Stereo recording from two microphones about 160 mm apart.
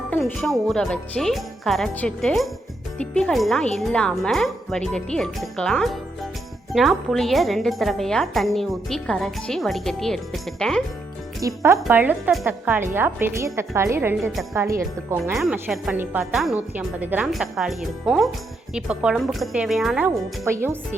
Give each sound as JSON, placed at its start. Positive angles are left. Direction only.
{"t": 0.3, "sound": "speech", "side_deg": 5}
{"t": 11.3, "sound": "speech", "side_deg": -20}
{"t": 20.4, "sound": "speech", "side_deg": -15}